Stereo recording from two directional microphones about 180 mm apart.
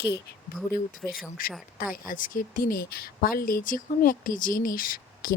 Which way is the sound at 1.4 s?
50° left (ahead or behind).